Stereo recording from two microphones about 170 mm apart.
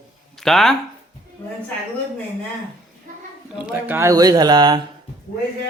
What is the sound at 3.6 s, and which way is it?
Speech, 10° right (ahead or behind).